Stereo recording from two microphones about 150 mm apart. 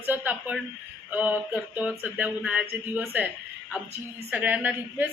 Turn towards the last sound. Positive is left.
turn(degrees=-10)  # may be behind; listen again after turning